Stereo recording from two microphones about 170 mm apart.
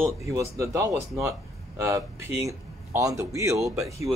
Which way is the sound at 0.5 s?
20° right (ahead or behind).